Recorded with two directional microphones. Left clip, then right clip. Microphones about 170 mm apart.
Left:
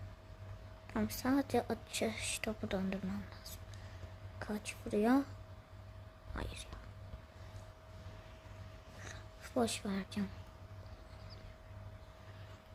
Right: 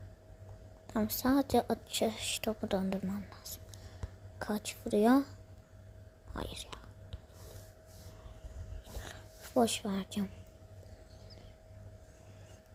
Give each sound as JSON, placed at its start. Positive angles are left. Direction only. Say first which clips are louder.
{"t": 0.9, "sound": "a woman's voice", "louder": "right 4 dB", "side_deg": -20}
{"t": 4.4, "sound": "a woman's voice", "louder": "right 5 dB", "side_deg": -25}
{"t": 6.3, "sound": "a woman's voice", "louder": "right 4 dB", "side_deg": -20}
{"t": 9.6, "sound": "speech", "louder": "right 6 dB", "side_deg": -15}